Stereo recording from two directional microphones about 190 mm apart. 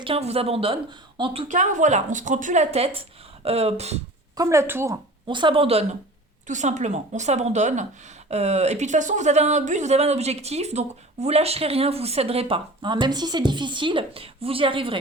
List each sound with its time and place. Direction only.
0.0 s speech: 30° right (ahead or behind)
1.5 s speech: 40° right (ahead or behind)
4.4 s speech: 15° right (ahead or behind)
5.3 s speech: 25° right (ahead or behind)